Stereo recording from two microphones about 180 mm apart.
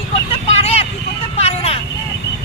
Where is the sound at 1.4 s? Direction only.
35° left (ahead or behind).